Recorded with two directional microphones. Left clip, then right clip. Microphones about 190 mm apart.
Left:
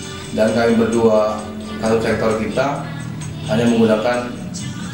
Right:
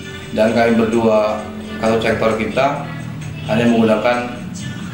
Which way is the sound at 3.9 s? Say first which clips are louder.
Right 2 dB; 10° right (ahead or behind).